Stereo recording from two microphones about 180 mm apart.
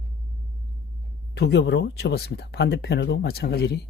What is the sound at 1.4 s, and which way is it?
Speech, 70° left (ahead or behind).